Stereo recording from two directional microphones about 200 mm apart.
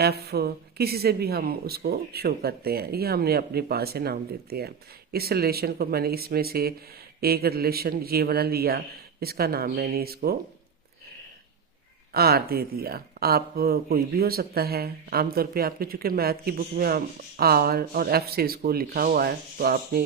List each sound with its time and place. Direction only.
0.0 s speech: 55° right (ahead or behind)
12.1 s speech: 50° right (ahead or behind)